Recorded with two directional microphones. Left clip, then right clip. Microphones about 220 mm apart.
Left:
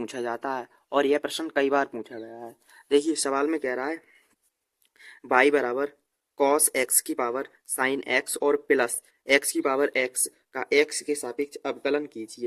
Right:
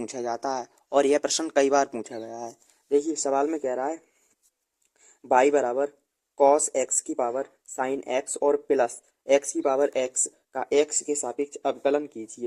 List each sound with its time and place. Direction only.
0.0 s speech: 5° left (ahead or behind)
2.9 s speech: 20° left (ahead or behind)
5.3 s speech: 15° left (ahead or behind)